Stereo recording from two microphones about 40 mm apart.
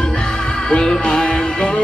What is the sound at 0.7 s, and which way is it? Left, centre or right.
Music, left.